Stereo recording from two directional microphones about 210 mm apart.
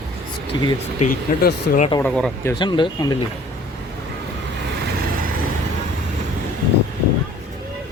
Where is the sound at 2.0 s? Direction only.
5° left (ahead or behind).